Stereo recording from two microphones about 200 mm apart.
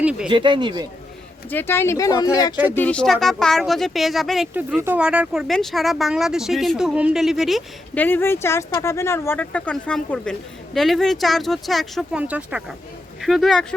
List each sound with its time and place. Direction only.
0.0 s speech: 5° right (ahead or behind)
0.3 s speech: 25° right (ahead or behind)
1.5 s speech: 10° left (ahead or behind)
2.7 s speech: 5° left (ahead or behind)